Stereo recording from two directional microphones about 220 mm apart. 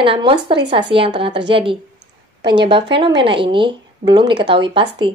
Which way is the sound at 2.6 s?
25° right (ahead or behind).